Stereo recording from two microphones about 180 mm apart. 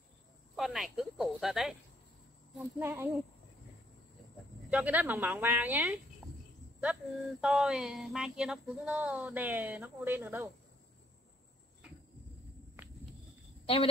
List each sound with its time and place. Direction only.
0.6 s speech: centre (ahead or behind)
2.8 s speech: 10° right (ahead or behind)
4.6 s speech: 10° right (ahead or behind)
6.2 s cricket: centre (ahead or behind)
6.8 s speech: 5° right (ahead or behind)
12.8 s walk: 10° right (ahead or behind)